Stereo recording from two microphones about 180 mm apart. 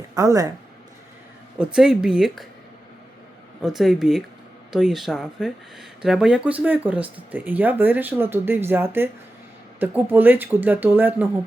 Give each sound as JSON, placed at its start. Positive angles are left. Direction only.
{"t": 0.1, "sound": "speech", "side_deg": -20}
{"t": 1.5, "sound": "speech", "side_deg": -5}
{"t": 3.6, "sound": "speech", "side_deg": 0}